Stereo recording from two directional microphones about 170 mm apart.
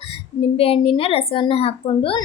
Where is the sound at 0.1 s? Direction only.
35° left (ahead or behind).